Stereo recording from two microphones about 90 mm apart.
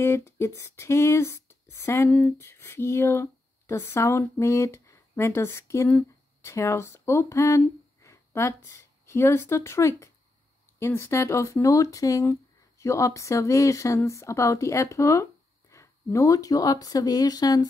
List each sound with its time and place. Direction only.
0.0 s speech: 30° left (ahead or behind)
2.0 s speech: 20° left (ahead or behind); by 17.6 s 45° left (ahead or behind)